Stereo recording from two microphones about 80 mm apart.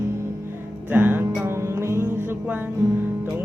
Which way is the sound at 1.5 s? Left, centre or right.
Right.